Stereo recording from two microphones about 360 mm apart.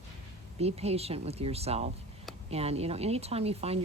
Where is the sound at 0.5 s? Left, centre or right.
Centre.